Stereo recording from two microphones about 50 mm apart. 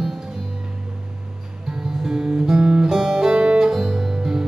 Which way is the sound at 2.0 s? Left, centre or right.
Centre.